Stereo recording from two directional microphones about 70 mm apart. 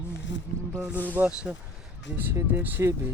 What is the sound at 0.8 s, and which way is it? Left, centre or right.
Speech, right.